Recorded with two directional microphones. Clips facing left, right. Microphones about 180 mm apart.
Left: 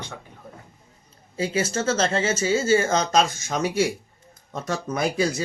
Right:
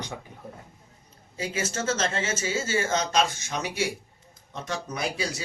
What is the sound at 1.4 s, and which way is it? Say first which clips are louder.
Speech: left 6 dB; 35° left (ahead or behind).